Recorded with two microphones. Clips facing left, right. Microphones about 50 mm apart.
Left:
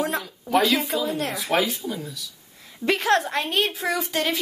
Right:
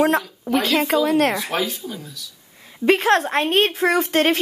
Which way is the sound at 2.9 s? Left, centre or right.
Right.